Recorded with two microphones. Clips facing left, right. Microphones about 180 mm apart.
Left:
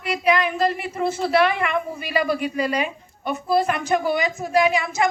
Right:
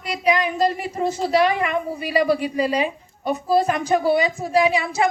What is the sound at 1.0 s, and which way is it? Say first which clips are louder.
Speech: right 1 dB; 25° right (ahead or behind).